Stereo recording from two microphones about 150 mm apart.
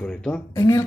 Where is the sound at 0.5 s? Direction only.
25° left (ahead or behind).